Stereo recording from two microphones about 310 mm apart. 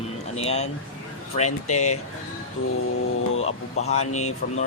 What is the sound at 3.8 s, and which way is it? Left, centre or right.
Speech, left.